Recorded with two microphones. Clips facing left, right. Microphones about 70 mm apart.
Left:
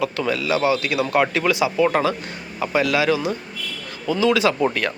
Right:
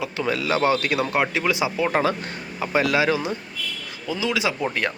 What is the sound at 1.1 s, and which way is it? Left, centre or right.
Speech, centre.